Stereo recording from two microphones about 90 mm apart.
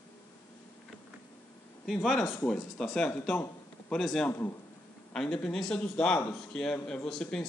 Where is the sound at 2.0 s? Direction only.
5° left (ahead or behind).